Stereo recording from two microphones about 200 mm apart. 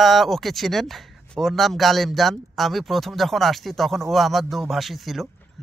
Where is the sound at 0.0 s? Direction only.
Centre (ahead or behind).